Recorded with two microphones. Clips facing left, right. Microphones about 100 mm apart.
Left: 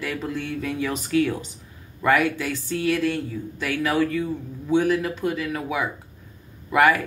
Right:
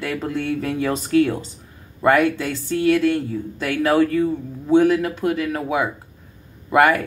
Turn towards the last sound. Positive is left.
turn(degrees=-40)  # may be behind; listen again after turning